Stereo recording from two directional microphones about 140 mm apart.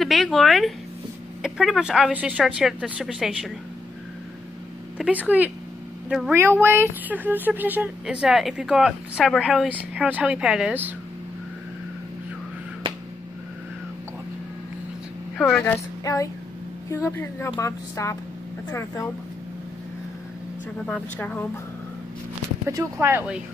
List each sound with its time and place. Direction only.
0.0 s a sound: centre (ahead or behind)
1.4 s speech: centre (ahead or behind)
4.9 s a woman's voice: 10° right (ahead or behind)
6.3 s speech: 15° right (ahead or behind)
15.3 s speech: 5° left (ahead or behind)
15.6 s a woman's voice: 25° left (ahead or behind)
20.8 s speech: 10° left (ahead or behind)
22.7 s speech: 20° right (ahead or behind)